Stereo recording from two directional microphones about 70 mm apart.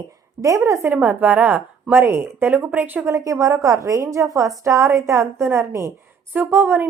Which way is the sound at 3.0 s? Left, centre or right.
Right.